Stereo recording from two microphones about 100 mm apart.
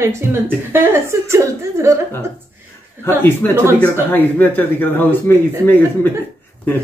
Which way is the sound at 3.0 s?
20° left (ahead or behind).